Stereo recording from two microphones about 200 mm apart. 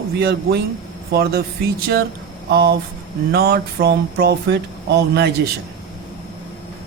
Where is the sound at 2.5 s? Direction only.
55° right (ahead or behind).